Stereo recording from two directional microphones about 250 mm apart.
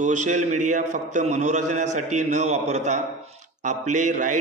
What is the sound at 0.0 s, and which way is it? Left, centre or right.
A man's voice, right.